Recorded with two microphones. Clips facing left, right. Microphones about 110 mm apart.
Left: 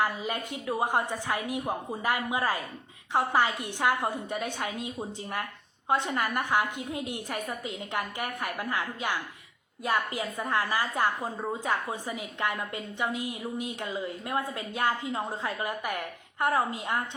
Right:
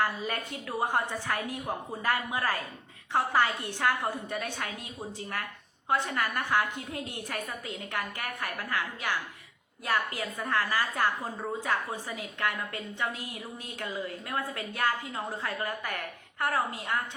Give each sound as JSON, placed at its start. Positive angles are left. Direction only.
{"t": 0.0, "sound": "a woman's voice", "side_deg": 15}